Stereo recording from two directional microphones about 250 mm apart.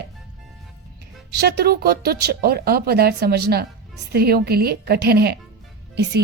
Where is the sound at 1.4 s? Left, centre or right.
Right.